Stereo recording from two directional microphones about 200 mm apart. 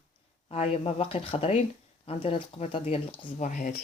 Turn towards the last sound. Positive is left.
turn(degrees=40)  # may be behind; listen again after turning